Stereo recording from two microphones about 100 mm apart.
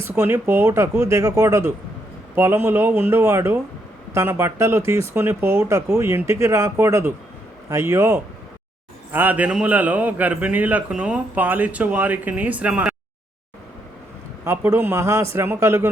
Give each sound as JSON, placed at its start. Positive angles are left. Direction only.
{"t": 0.0, "sound": "a man's voice", "side_deg": -25}
{"t": 14.4, "sound": "speech", "side_deg": -25}